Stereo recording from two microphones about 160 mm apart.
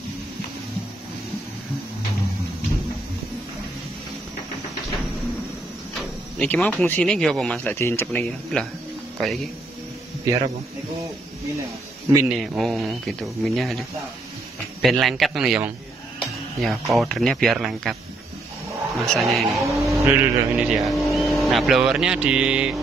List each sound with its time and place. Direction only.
5.9 s speech: 5° left (ahead or behind)
10.3 s a man's voice: 20° right (ahead or behind)
12.3 s speech: centre (ahead or behind)
18.9 s speech: centre (ahead or behind)
20.0 s speech: 15° right (ahead or behind)